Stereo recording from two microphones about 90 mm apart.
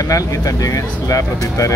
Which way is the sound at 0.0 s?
40° left (ahead or behind).